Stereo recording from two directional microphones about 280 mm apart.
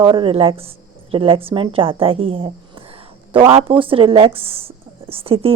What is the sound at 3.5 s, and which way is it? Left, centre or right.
Speech, centre.